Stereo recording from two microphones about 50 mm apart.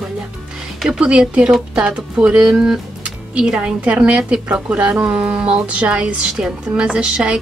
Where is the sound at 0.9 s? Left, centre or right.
Right.